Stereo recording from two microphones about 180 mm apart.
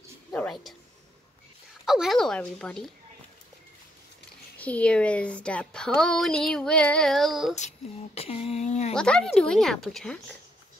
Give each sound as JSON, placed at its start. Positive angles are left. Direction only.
{"t": 0.3, "sound": "speech", "side_deg": 5}
{"t": 1.9, "sound": "a woman's voice", "side_deg": 0}
{"t": 4.6, "sound": "a woman's voice", "side_deg": 10}
{"t": 7.5, "sound": "speech", "side_deg": 35}
{"t": 8.9, "sound": "a woman's voice", "side_deg": 5}